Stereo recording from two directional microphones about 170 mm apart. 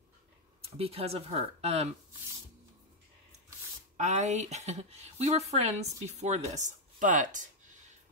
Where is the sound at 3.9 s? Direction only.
45° right (ahead or behind).